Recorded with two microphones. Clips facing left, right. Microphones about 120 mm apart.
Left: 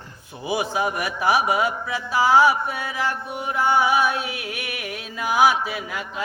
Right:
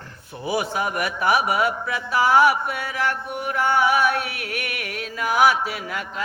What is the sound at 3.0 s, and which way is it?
Speech, 15° left (ahead or behind).